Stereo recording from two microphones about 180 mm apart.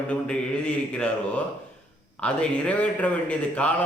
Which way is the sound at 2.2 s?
5° left (ahead or behind).